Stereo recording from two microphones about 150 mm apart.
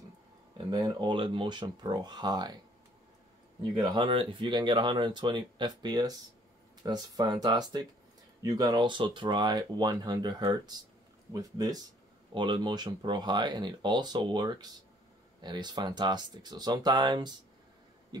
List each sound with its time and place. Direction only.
0.6 s speech: 30° right (ahead or behind)
3.9 s speech: 35° right (ahead or behind)